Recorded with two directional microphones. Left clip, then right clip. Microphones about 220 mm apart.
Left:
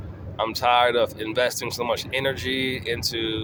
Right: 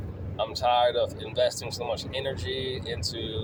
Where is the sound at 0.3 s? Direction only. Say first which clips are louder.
Left 4 dB; 30° left (ahead or behind).